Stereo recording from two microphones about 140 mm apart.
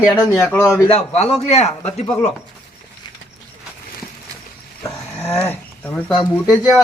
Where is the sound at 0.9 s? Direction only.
50° left (ahead or behind).